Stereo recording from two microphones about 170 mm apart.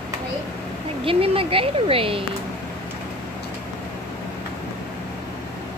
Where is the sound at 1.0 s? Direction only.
30° right (ahead or behind).